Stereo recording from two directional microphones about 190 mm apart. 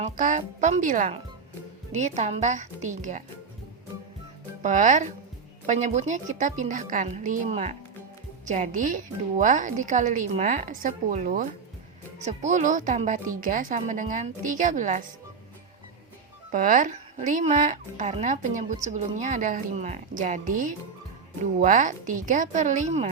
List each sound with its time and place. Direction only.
0.0 s a woman's voice: 40° right (ahead or behind)
4.6 s a woman's voice: 40° right (ahead or behind)
16.5 s a woman's voice: 45° right (ahead or behind)